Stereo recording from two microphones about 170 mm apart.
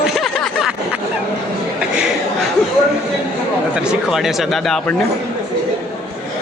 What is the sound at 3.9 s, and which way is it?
Speech, centre (ahead or behind).